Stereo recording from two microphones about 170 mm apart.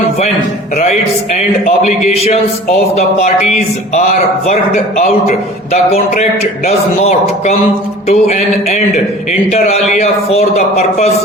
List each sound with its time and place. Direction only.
2.9 s a man's voice: 40° left (ahead or behind)